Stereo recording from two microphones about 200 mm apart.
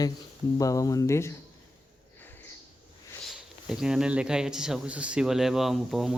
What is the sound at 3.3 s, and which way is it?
Speech, 5° right (ahead or behind).